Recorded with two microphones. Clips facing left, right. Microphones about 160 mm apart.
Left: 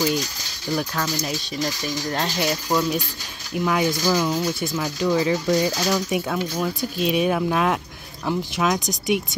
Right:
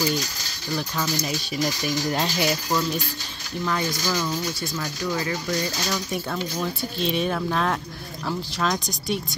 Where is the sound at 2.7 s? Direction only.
15° left (ahead or behind).